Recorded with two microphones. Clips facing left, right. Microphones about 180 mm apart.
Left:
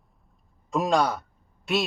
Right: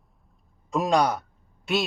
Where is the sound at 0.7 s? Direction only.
Centre (ahead or behind).